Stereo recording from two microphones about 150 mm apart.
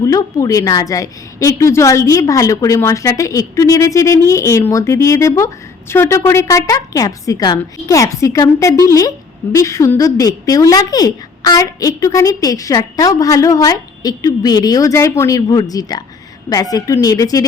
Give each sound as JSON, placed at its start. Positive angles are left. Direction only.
{"t": 0.0, "sound": "a woman's voice", "side_deg": 20}